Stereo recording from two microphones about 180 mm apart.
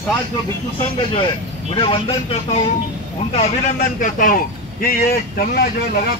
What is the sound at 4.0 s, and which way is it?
Speech, 50° left (ahead or behind).